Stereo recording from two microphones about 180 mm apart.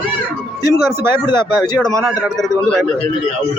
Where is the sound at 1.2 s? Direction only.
25° left (ahead or behind).